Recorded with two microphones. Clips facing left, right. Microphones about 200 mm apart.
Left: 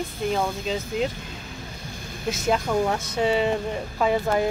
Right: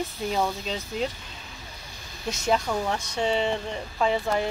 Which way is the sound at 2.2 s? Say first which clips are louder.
Left 2 dB; centre (ahead or behind).